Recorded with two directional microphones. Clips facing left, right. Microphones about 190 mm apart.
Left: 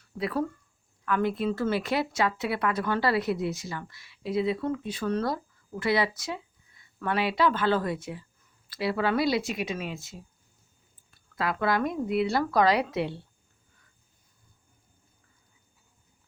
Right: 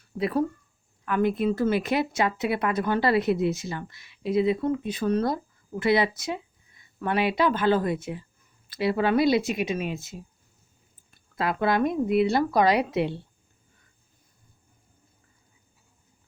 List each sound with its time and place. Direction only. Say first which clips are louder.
0.2 s speech: right 4 dB; 20° right (ahead or behind)